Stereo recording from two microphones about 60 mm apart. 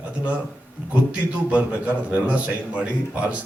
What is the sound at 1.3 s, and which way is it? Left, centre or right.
A man's voice, right.